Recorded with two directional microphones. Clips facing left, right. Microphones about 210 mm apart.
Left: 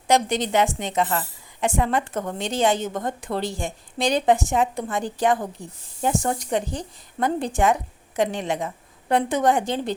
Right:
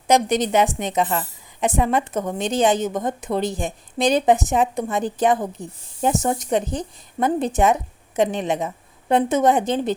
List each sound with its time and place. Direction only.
0.1 s a woman's voice: 20° right (ahead or behind)